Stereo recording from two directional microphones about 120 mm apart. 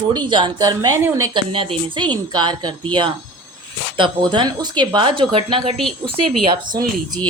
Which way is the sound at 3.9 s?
45° right (ahead or behind).